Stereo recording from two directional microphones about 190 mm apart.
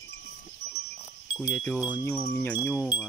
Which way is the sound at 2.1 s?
10° left (ahead or behind).